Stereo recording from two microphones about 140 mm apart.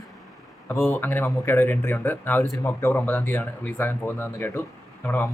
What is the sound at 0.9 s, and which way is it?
Speech, 15° left (ahead or behind).